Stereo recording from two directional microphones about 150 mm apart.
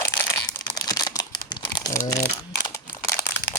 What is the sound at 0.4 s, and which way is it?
Crumpling, 25° left (ahead or behind).